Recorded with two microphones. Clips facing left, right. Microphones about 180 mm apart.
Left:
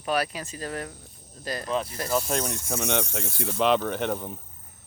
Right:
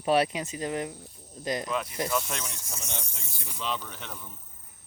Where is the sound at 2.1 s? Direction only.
40° left (ahead or behind).